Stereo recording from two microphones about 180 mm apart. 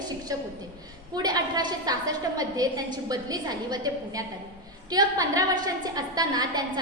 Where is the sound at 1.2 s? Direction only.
20° right (ahead or behind).